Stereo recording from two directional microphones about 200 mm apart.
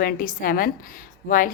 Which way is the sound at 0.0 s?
45° left (ahead or behind).